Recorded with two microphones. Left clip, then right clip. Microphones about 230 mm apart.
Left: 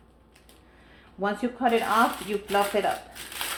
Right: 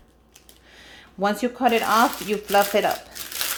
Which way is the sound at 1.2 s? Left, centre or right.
Right.